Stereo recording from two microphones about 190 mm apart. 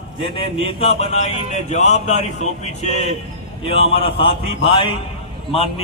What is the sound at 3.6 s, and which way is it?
A man's voice, 30° left (ahead or behind).